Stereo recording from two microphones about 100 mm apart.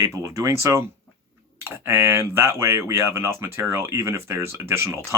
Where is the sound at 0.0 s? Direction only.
30° right (ahead or behind).